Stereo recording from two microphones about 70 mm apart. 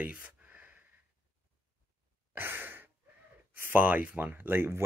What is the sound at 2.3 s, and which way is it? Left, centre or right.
Sigh, right.